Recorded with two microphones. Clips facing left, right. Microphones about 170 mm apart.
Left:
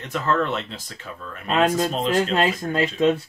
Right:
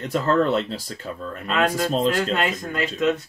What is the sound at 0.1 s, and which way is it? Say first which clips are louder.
Speech: right 3 dB; 35° right (ahead or behind).